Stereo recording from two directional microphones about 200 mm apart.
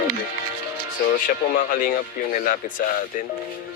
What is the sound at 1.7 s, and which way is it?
Speech, 45° left (ahead or behind).